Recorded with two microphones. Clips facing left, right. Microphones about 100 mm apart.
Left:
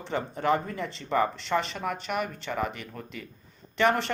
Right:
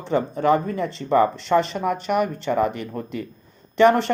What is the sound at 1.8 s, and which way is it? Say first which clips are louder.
Speech: right 9 dB; 25° right (ahead or behind).